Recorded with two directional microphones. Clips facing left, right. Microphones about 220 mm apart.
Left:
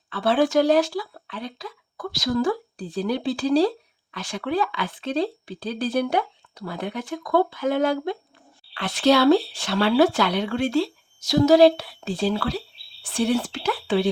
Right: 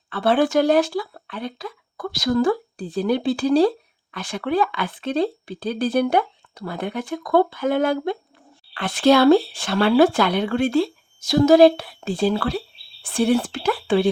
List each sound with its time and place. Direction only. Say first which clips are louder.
0.1 s speech: right 2 dB; 55° right (ahead or behind)